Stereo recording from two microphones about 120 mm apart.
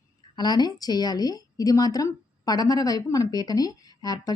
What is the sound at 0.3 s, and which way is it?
A woman's voice, 35° left (ahead or behind).